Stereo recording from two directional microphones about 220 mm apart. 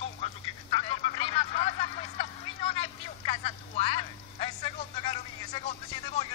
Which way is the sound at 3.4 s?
25° left (ahead or behind).